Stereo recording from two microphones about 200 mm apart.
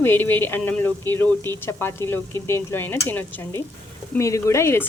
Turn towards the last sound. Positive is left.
turn(degrees=10)  # may be behind; listen again after turning